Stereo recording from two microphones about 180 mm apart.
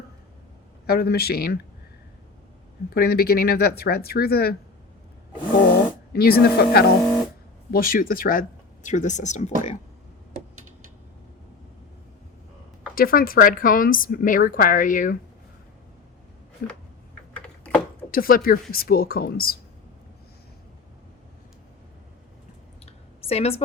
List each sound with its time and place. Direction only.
0.9 s speech: 60° left (ahead or behind)
2.9 s speech: 60° left (ahead or behind)
6.1 s a woman's voice: 60° left (ahead or behind); by 9.7 s 40° left (ahead or behind)
13.0 s a woman's voice: 55° left (ahead or behind)
17.3 s typing: 5° left (ahead or behind)
18.1 s speech: 50° left (ahead or behind)
22.9 s a sound: 35° left (ahead or behind)